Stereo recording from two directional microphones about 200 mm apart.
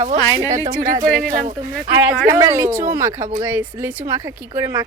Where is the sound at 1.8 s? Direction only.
10° right (ahead or behind).